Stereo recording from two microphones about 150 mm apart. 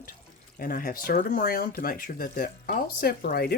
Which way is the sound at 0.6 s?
75° left (ahead or behind).